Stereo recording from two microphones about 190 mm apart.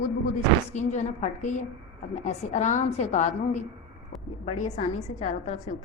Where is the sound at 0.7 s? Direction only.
40° left (ahead or behind).